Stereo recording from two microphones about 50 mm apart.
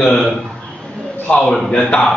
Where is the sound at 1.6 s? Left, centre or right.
Centre.